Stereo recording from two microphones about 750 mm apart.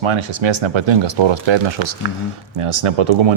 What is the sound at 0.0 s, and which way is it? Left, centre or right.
Speech, right.